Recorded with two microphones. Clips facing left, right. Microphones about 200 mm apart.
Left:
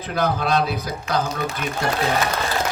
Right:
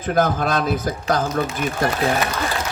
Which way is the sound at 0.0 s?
50° right (ahead or behind).